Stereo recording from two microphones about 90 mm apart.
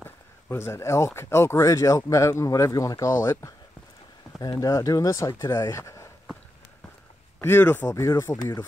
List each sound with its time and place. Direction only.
0.0 s speech: 25° left (ahead or behind)
7.3 s speech: 25° left (ahead or behind)
7.9 s speech: 35° left (ahead or behind)